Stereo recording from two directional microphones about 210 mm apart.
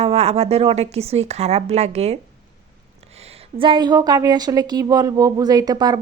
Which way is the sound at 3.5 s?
25° right (ahead or behind).